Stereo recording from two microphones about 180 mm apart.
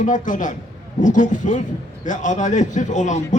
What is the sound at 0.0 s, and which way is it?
A man's voice, 45° left (ahead or behind).